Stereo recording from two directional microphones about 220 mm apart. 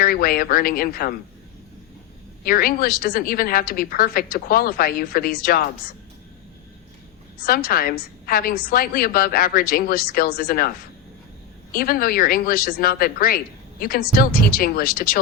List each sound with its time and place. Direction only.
0.0 s speech: 40° left (ahead or behind)
2.4 s speech: 40° left (ahead or behind)
7.4 s speech: 40° left (ahead or behind)
11.7 s speech: 40° left (ahead or behind)